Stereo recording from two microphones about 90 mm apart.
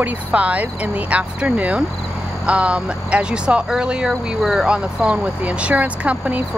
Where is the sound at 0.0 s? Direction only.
15° right (ahead or behind).